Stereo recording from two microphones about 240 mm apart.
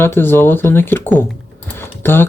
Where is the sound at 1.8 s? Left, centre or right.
Centre.